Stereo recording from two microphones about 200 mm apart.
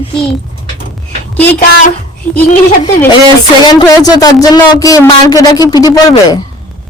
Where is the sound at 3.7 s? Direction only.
20° left (ahead or behind).